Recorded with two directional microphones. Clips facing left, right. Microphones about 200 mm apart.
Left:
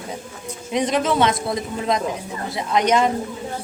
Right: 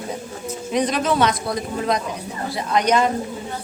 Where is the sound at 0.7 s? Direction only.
20° left (ahead or behind).